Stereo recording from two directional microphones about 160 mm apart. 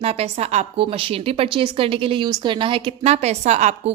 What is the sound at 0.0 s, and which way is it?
A woman's voice, 40° right (ahead or behind).